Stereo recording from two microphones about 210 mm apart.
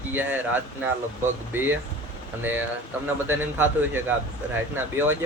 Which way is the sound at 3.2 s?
10° right (ahead or behind).